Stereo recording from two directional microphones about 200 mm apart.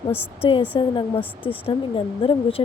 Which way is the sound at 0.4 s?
25° left (ahead or behind).